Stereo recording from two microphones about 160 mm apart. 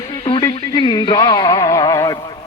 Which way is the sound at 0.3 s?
30° left (ahead or behind).